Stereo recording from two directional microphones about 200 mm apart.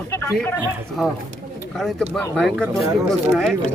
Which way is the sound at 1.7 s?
Centre (ahead or behind).